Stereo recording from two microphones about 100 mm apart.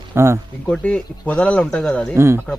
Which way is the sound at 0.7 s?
10° left (ahead or behind).